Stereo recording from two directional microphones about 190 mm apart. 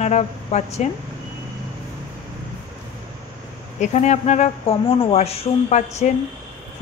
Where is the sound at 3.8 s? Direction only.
40° left (ahead or behind).